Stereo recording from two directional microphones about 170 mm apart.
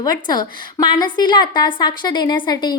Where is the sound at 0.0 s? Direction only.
25° left (ahead or behind).